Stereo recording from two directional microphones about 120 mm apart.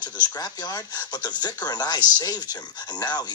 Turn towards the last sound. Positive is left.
turn(degrees=35)  # may be behind; listen again after turning